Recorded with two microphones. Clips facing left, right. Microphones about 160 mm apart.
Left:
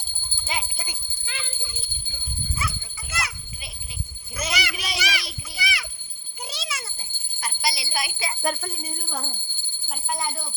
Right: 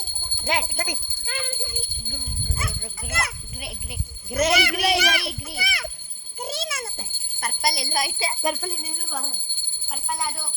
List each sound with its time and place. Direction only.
0.4 s speech: 70° right (ahead or behind)
1.3 s a child's voice: 50° right (ahead or behind)
4.3 s a child's voice: 70° right (ahead or behind); by 5.9 s 50° right (ahead or behind)
6.4 s a sound: 50° right (ahead or behind)
7.4 s a child's voice: 50° right (ahead or behind); by 8.4 s 35° right (ahead or behind)
8.6 s speech: centre (ahead or behind)